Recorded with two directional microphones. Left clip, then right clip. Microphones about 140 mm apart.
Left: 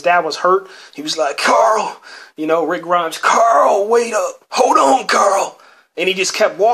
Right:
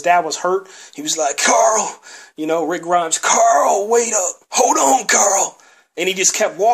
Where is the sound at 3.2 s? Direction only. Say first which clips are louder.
Left 3 dB; 25° right (ahead or behind).